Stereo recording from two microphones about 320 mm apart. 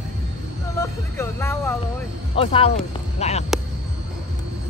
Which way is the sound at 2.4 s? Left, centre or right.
Centre.